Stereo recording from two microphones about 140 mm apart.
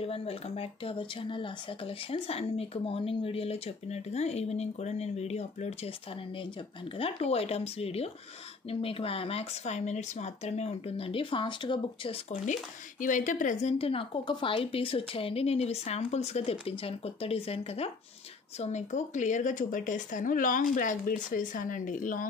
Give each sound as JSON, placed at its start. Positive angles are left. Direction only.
{"t": 0.0, "sound": "speech", "side_deg": 45}
{"t": 13.0, "sound": "speech", "side_deg": 70}
{"t": 18.6, "sound": "speech", "side_deg": 55}